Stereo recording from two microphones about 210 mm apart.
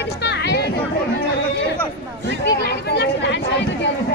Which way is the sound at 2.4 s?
50° left (ahead or behind).